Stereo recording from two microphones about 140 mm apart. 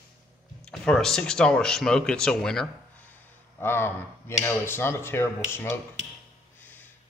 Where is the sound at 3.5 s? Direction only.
15° left (ahead or behind).